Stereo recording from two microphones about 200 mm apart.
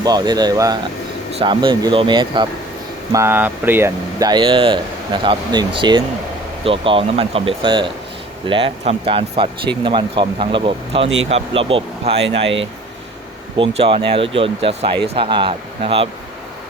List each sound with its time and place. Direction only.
0.0 s speech: 20° right (ahead or behind)
3.1 s speech: 15° right (ahead or behind)
13.6 s speech: 25° right (ahead or behind)